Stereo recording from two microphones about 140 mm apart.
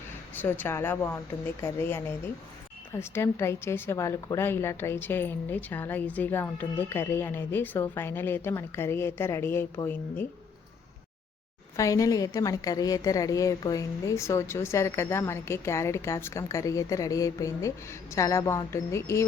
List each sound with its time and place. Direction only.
0.4 s a woman's voice: 15° left (ahead or behind)
11.8 s a woman's voice: 25° left (ahead or behind)